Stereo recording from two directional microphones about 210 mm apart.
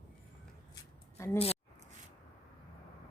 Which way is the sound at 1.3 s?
30° left (ahead or behind).